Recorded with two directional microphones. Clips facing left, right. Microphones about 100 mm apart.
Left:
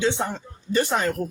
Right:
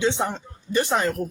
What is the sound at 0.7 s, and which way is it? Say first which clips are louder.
Music: even; 15° right (ahead or behind).